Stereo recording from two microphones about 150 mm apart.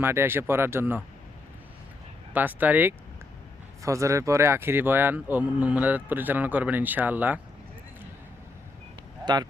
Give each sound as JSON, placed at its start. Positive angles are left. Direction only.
{"t": 0.0, "sound": "speech", "side_deg": -15}
{"t": 2.3, "sound": "speech", "side_deg": -10}
{"t": 9.2, "sound": "speech", "side_deg": -25}